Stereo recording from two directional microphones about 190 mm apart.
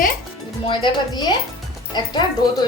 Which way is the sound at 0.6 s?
25° left (ahead or behind).